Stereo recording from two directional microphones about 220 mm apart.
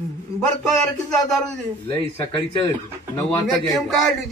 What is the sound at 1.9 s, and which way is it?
Speech, 15° left (ahead or behind).